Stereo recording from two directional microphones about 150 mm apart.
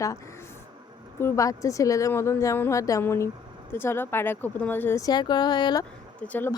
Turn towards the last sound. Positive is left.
turn(degrees=10)  # may be behind; listen again after turning